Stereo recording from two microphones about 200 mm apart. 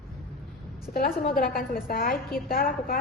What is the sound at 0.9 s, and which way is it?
A woman's voice, 45° left (ahead or behind).